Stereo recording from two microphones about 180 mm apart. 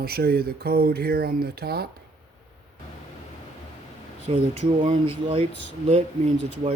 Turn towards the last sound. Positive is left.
turn(degrees=-35)  # may be behind; listen again after turning